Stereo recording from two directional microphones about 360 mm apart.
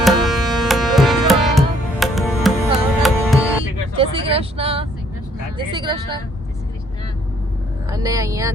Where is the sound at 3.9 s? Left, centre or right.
Centre.